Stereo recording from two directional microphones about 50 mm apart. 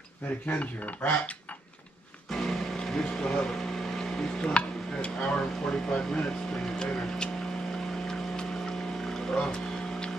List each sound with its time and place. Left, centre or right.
0.6 s speech: left
2.3 s vehicle: centre
3.8 s boat: centre
4.4 s speech: left
8.1 s a sound: centre